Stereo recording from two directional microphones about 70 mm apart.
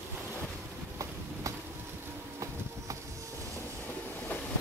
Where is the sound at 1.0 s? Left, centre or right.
Right.